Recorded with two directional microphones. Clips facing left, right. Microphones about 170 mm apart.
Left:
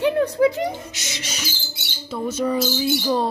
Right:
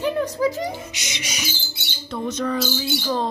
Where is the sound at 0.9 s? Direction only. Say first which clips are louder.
Even; 15° right (ahead or behind).